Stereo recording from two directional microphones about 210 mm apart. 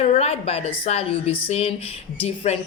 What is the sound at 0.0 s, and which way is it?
A woman's voice, 30° left (ahead or behind).